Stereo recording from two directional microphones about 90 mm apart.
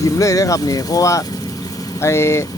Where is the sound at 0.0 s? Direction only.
35° left (ahead or behind).